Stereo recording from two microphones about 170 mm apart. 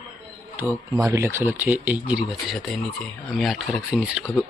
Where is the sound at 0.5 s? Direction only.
15° right (ahead or behind); by 4.0 s 5° left (ahead or behind).